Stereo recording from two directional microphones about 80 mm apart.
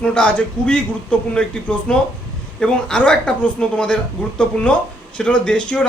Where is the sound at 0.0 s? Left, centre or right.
Centre.